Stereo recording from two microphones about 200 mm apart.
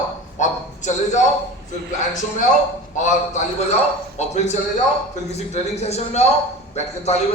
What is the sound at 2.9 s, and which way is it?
Speech, 40° left (ahead or behind).